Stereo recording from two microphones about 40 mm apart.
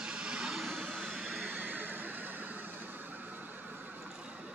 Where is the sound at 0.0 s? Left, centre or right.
Right.